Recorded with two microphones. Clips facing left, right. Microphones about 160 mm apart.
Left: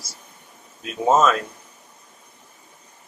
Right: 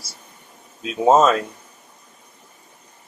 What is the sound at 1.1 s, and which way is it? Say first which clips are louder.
Speech: right 3 dB; 30° right (ahead or behind).